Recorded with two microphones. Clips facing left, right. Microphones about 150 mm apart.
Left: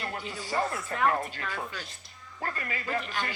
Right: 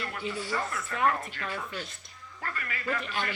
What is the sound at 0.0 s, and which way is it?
Speech, 35° left (ahead or behind).